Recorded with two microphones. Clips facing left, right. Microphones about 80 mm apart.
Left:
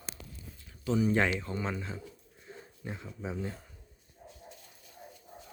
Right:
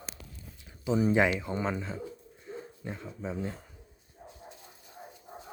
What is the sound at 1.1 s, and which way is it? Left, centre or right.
Speech, centre.